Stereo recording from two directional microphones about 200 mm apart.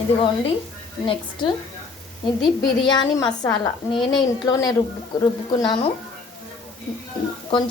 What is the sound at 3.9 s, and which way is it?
A woman's voice, 25° left (ahead or behind).